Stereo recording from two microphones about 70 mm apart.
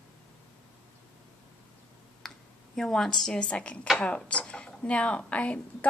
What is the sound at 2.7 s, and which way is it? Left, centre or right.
Speech, centre.